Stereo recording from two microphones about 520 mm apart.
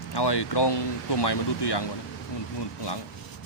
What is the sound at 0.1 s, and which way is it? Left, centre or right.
Speech, left.